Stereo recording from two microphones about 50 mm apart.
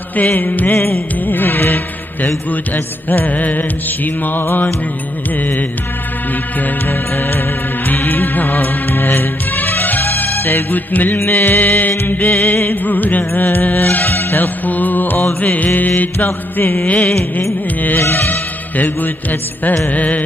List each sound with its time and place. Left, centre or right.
0.1 s music: left
6.9 s music: left
16.3 s music: left
16.8 s music: left
18.0 s music: left
19.9 s music: left